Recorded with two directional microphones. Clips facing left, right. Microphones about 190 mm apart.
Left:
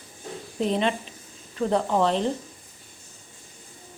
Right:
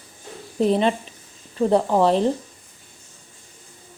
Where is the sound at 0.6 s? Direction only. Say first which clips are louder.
Right 5 dB; 40° right (ahead or behind).